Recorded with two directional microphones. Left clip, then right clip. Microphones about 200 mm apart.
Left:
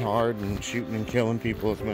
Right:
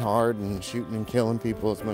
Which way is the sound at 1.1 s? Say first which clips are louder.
Right 1 dB; 30° right (ahead or behind).